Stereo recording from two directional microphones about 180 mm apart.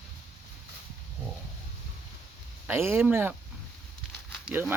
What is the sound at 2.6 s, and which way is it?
Speech, 15° right (ahead or behind).